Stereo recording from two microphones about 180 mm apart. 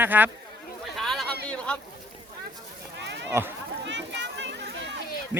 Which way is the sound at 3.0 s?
75° right (ahead or behind).